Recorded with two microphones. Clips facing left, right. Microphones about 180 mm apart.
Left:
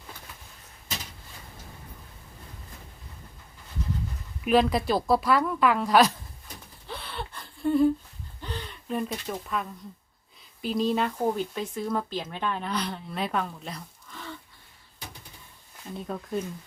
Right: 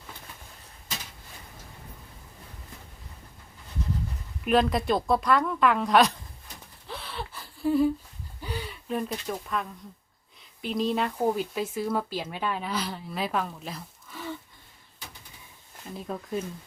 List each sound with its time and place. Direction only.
4.4 s speech: centre (ahead or behind)
6.8 s gasp: centre (ahead or behind)
10.6 s speech: centre (ahead or behind)
16.0 s speech: centre (ahead or behind)